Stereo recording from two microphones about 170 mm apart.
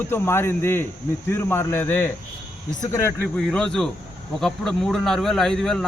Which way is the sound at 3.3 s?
5° left (ahead or behind).